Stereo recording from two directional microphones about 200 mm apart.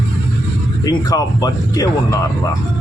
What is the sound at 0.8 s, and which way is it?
Speech, 20° left (ahead or behind).